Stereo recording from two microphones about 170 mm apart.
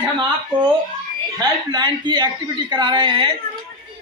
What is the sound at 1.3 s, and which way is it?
A woman's voice, 25° right (ahead or behind).